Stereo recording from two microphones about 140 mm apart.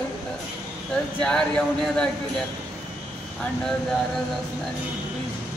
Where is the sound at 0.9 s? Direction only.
5° left (ahead or behind).